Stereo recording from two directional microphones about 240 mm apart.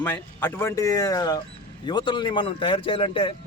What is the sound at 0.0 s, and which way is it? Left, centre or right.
A man's voice, centre.